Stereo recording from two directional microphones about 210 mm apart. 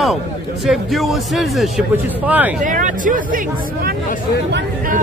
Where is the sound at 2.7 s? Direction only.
40° right (ahead or behind).